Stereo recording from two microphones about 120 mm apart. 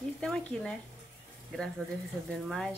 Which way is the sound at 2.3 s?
5° left (ahead or behind).